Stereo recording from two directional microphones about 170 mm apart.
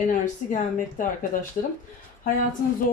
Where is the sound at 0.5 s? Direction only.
50° left (ahead or behind).